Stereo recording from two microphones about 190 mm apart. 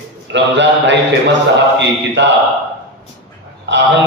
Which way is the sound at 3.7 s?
70° right (ahead or behind).